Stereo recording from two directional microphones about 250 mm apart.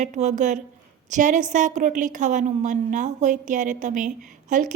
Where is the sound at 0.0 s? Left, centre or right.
Right.